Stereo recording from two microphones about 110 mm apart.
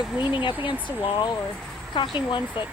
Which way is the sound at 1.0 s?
40° left (ahead or behind).